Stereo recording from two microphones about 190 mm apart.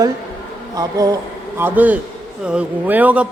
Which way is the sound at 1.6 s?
10° right (ahead or behind).